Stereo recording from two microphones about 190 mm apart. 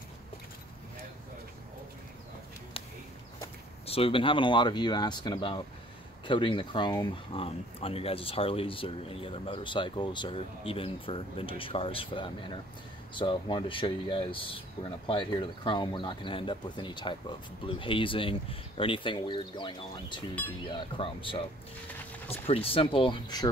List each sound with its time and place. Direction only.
3.8 s speech: 30° left (ahead or behind)
22.5 s speech: 30° left (ahead or behind)